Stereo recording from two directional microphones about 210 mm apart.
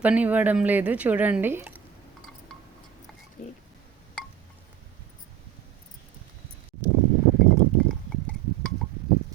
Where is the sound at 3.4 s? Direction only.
35° left (ahead or behind).